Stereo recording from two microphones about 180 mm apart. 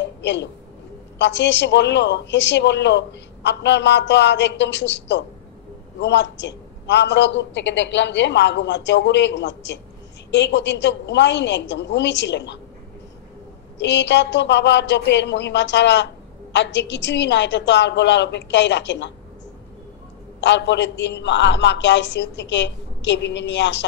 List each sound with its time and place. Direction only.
0.2 s a woman's voice: 80° left
13.7 s a woman's voice: 80° left
20.3 s a woman's voice: 80° left